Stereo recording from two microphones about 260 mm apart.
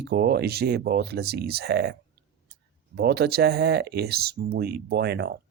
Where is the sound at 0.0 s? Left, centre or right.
Right.